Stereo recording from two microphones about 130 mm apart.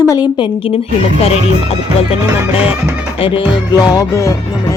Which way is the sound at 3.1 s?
45° left (ahead or behind).